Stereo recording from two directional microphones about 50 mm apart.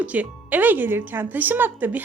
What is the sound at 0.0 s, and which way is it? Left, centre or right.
A woman's voice, right.